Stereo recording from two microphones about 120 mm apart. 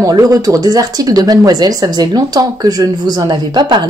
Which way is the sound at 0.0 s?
30° right (ahead or behind).